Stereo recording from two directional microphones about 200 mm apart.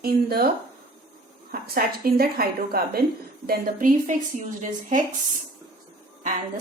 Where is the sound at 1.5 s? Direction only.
50° right (ahead or behind).